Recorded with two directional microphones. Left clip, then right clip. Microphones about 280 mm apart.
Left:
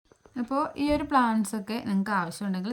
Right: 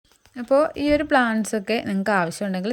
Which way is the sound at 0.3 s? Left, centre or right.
Centre.